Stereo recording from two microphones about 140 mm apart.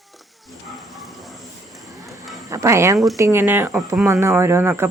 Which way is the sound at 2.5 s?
20° right (ahead or behind).